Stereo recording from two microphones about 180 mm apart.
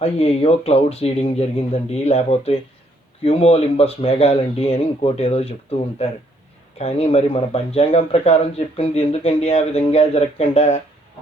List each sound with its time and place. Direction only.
0.0 s speech: 35° left (ahead or behind)